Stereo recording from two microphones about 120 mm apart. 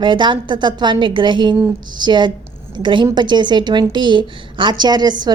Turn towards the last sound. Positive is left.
turn(degrees=-35)  # may be behind; listen again after turning